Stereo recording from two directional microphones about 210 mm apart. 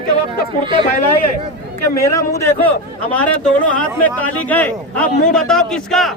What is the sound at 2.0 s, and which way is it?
A man's voice, 15° left (ahead or behind).